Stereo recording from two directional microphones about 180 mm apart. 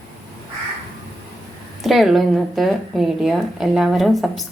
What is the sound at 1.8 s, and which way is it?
A woman's voice, centre (ahead or behind).